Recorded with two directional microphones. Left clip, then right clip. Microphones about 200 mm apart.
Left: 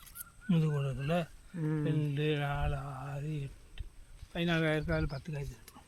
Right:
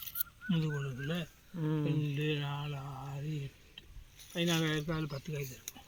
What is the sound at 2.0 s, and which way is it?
Mantra, 35° left (ahead or behind).